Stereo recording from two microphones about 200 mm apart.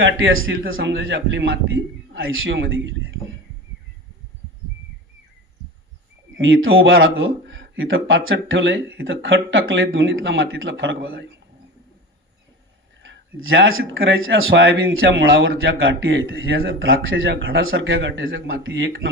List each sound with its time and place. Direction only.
0.0 s speech: 80° right
0.7 s speech: 70° right (ahead or behind)
6.3 s speech: 75° right (ahead or behind)
13.0 s speech: 70° right (ahead or behind)